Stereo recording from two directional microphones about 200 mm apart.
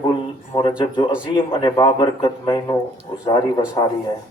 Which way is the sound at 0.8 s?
25° left (ahead or behind).